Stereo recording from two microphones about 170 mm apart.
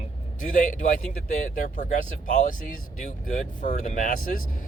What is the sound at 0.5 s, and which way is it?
Speech, 50° left (ahead or behind).